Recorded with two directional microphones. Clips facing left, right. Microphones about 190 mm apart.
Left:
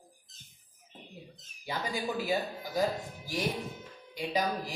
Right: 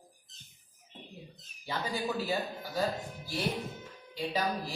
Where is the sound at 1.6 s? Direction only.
15° left (ahead or behind).